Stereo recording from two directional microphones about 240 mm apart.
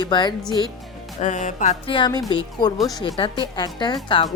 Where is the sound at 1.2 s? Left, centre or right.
Left.